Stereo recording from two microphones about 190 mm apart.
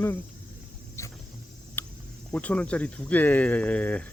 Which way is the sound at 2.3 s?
5° left (ahead or behind).